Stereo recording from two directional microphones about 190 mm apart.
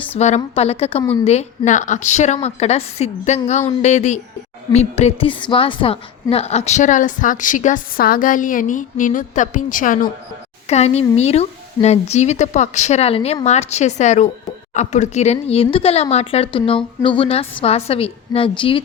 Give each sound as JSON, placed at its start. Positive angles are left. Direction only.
{"t": 0.2, "sound": "a woman's voice", "side_deg": 35}